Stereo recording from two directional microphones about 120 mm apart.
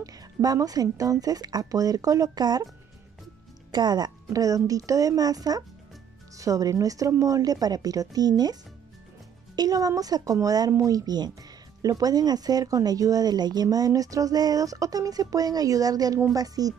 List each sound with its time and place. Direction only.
0.0 s speech: 30° right (ahead or behind)
3.7 s speech: 35° right (ahead or behind)
9.6 s speech: 30° right (ahead or behind)